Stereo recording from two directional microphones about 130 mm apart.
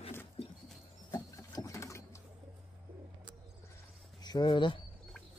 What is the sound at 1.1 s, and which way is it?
Sewing machine, 25° left (ahead or behind).